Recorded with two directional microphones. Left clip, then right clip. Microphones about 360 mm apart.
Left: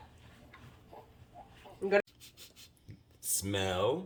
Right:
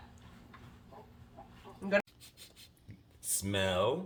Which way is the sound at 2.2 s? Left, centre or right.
Centre.